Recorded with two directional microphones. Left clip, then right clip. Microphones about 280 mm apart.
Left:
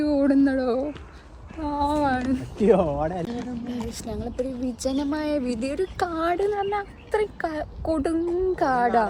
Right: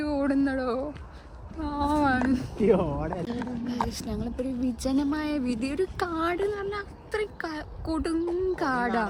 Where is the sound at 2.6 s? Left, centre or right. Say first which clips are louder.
Left 5 dB; left.